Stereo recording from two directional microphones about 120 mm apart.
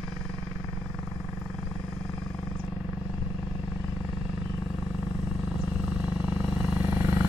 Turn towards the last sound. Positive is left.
turn(degrees=-15)  # may be behind; listen again after turning